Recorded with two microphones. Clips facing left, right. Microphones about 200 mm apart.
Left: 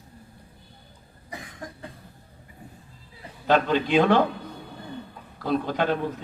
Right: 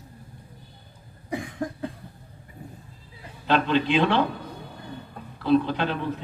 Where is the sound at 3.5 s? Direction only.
45° left (ahead or behind).